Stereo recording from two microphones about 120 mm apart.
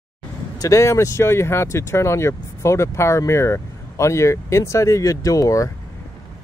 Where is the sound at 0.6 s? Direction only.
25° left (ahead or behind).